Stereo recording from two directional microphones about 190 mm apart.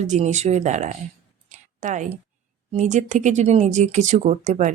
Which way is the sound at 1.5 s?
40° right (ahead or behind).